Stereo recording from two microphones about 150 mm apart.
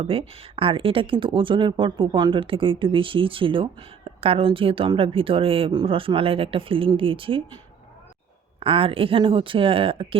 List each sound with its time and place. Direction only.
0.0 s speech: 40° right (ahead or behind)
8.6 s speech: 35° right (ahead or behind)